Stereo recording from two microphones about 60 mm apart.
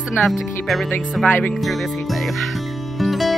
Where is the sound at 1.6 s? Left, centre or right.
Centre.